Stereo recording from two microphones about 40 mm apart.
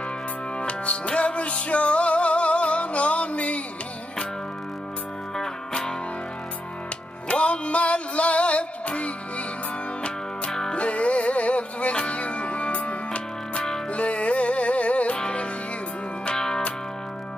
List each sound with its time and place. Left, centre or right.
0.6 s music: left
5.7 s music: left
7.2 s music: left
10.7 s music: left
16.3 s music: centre